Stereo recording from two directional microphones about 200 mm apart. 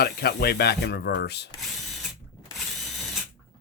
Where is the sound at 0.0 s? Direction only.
50° left (ahead or behind).